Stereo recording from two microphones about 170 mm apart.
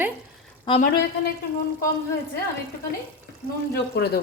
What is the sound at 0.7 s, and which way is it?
Speech, 25° left (ahead or behind).